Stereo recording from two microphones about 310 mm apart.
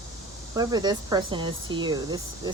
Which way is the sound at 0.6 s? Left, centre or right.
Centre.